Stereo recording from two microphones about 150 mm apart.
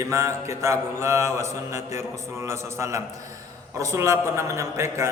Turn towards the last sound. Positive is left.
turn(degrees=-20)  # may be behind; listen again after turning